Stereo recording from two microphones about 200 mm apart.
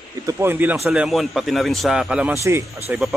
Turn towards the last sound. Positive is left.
turn(degrees=0)  # may be behind; listen again after turning